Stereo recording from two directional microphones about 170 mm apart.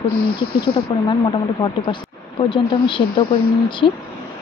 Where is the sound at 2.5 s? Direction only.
30° left (ahead or behind).